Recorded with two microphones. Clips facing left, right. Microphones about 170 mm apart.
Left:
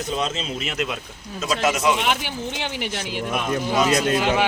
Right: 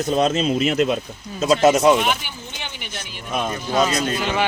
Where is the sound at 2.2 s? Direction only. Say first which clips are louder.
Left 7 dB; 90° left.